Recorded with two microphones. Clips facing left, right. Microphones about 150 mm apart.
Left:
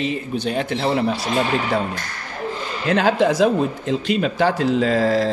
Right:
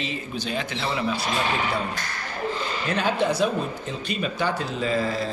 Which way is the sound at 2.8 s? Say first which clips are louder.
Left 7 dB; 90° left.